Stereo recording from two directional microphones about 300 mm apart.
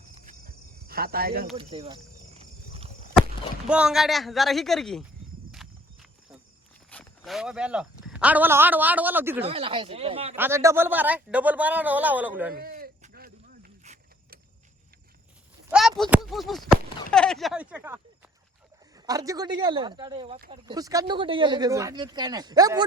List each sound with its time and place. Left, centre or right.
0.1 s cricket: right
1.5 s speech: centre
2.4 s wild animals: centre
3.7 s speech: centre
5.5 s horse: centre
6.9 s speech: centre
9.4 s speech: centre
10.3 s speech: centre
12.5 s a sound: right
15.7 s a sound: centre
17.1 s speech: centre